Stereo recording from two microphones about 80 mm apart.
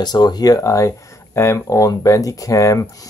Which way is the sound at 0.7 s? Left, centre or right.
Left.